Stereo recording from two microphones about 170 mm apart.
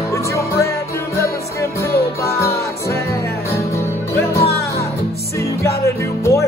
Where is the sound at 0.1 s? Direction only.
20° left (ahead or behind).